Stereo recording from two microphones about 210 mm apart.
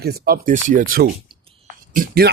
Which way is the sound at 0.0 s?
45° right (ahead or behind).